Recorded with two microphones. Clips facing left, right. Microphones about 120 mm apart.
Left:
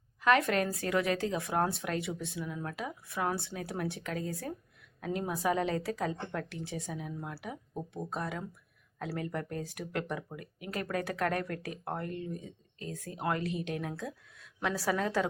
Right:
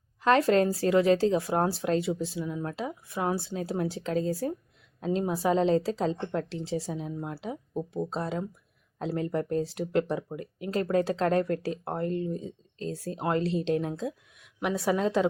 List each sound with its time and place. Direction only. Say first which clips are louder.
0.2 s a woman's voice: right 5 dB; 30° right (ahead or behind)